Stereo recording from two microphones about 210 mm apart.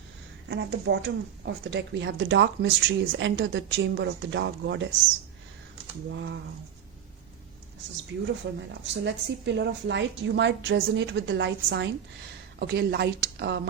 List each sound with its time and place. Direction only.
0.4 s speech: 55° right (ahead or behind)
6.1 s speech: 60° right (ahead or behind)
8.1 s a woman's voice: 60° right (ahead or behind)